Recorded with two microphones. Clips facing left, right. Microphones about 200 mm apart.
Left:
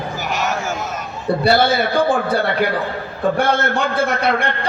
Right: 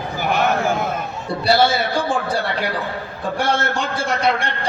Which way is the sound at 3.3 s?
55° left (ahead or behind).